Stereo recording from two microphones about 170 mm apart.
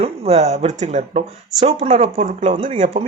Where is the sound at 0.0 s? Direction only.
35° right (ahead or behind).